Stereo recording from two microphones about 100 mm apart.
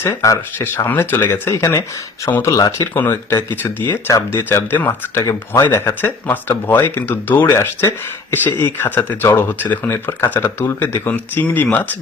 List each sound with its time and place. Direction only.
0.0 s speech: 30° left (ahead or behind)
3.5 s speech: 20° left (ahead or behind)